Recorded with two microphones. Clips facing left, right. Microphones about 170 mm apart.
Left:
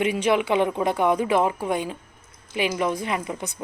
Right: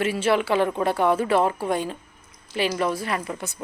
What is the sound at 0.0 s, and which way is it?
A woman's voice, 15° left (ahead or behind).